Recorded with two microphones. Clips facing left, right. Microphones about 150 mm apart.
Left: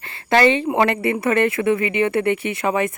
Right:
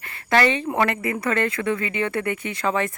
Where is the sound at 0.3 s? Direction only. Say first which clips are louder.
Left 4 dB; 30° left (ahead or behind).